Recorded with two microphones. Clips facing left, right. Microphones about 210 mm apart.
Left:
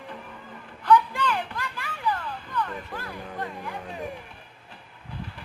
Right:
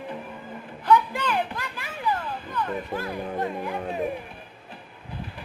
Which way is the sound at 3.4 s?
20° right (ahead or behind).